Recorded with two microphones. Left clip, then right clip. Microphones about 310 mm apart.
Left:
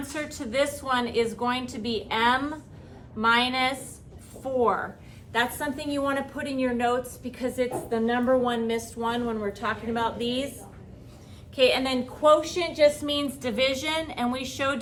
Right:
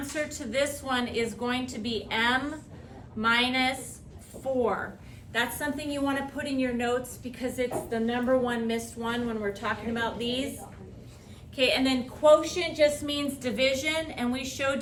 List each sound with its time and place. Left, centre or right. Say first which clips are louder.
0.1 s a woman's voice: even; centre
11.5 s a woman's voice: left 3 dB; centre